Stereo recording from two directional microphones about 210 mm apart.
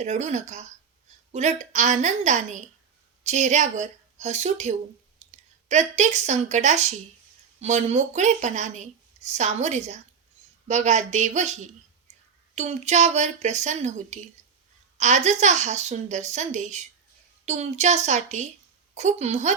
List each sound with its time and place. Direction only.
0.0 s a woman's voice: 35° right (ahead or behind)